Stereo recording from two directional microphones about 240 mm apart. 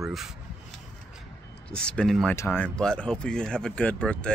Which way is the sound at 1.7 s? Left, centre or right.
Centre.